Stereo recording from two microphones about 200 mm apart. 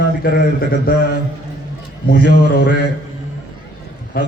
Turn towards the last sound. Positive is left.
turn(degrees=50)  # may be behind; listen again after turning